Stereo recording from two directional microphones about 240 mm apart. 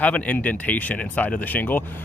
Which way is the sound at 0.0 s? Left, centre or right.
Centre.